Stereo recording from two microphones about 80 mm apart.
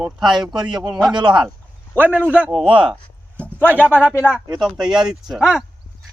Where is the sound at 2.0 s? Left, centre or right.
Right.